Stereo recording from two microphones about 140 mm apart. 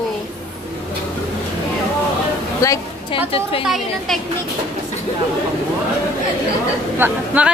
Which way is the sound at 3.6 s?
Centre (ahead or behind).